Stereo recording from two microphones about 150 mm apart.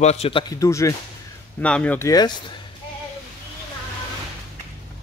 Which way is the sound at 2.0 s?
25° left (ahead or behind).